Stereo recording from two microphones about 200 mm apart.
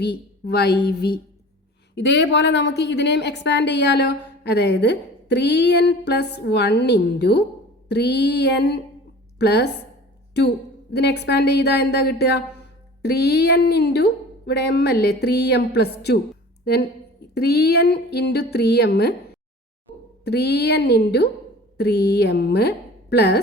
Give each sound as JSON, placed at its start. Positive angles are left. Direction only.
{"t": 0.0, "sound": "a woman's voice", "side_deg": 55}
{"t": 10.9, "sound": "a woman's voice", "side_deg": 55}
{"t": 17.3, "sound": "a woman's voice", "side_deg": 55}
{"t": 20.2, "sound": "a woman's voice", "side_deg": 55}